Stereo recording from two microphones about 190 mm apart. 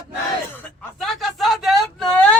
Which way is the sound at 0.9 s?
Centre (ahead or behind).